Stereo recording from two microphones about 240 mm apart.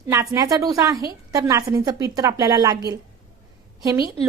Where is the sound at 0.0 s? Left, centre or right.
Centre.